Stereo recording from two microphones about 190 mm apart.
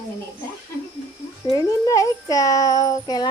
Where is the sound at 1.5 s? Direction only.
20° left (ahead or behind).